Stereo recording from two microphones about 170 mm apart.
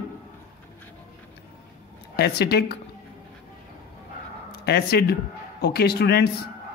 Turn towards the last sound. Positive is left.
turn(degrees=70)  # may be behind; listen again after turning